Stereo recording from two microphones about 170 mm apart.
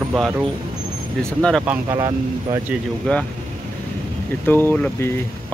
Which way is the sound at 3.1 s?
5° left (ahead or behind).